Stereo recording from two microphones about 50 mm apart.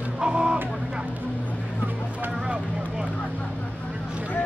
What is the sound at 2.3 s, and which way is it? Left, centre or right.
Speech, centre.